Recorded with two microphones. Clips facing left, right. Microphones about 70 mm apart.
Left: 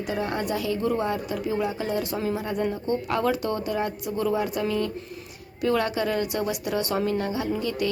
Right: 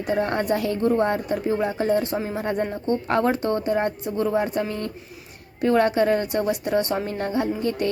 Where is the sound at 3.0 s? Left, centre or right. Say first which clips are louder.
Right 4 dB; right.